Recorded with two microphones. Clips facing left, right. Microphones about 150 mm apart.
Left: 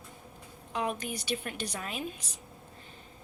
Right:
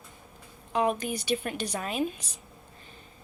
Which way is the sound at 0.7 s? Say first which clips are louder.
Right 6 dB; 45° right (ahead or behind).